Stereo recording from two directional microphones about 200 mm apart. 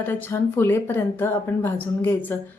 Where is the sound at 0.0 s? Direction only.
10° left (ahead or behind).